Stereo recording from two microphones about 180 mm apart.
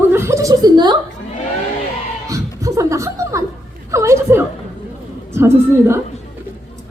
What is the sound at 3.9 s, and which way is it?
A woman's voice, 15° right (ahead or behind).